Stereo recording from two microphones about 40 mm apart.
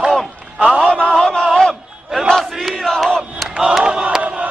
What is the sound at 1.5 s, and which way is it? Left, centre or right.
Crowd, centre.